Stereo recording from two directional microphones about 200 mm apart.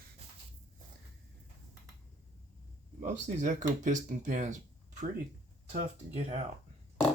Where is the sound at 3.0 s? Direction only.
40° right (ahead or behind).